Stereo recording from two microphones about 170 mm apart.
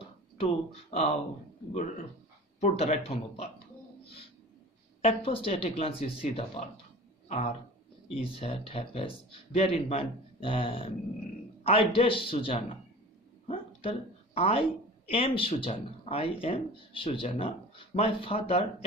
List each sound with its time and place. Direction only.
0.4 s speech: 40° left (ahead or behind)
4.0 s a sound: 35° left (ahead or behind)
5.0 s a man's voice: 35° left (ahead or behind)